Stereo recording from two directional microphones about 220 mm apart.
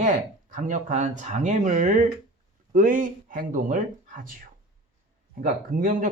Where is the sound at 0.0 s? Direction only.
35° right (ahead or behind).